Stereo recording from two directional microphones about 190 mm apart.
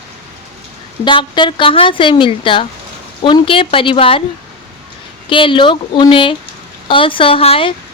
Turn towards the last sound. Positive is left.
turn(degrees=30)  # may be behind; listen again after turning